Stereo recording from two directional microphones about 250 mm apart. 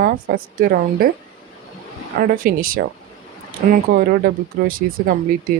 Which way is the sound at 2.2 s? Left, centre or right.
Right.